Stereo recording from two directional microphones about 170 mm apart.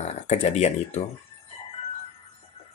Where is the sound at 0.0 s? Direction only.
40° left (ahead or behind).